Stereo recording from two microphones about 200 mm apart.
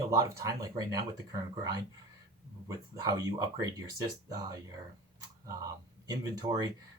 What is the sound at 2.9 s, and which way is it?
Speech, 20° right (ahead or behind).